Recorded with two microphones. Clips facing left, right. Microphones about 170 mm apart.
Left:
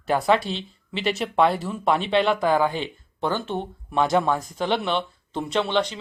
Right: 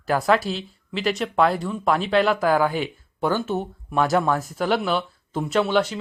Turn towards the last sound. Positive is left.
turn(degrees=-5)  # may be behind; listen again after turning